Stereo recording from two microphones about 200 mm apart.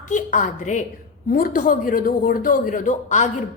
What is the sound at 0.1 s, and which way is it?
A man's voice, 40° left (ahead or behind).